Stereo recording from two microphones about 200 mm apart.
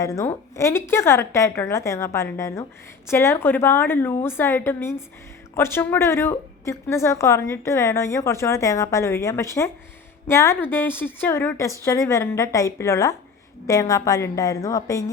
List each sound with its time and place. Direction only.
0.0 s a woman's voice: 15° left (ahead or behind)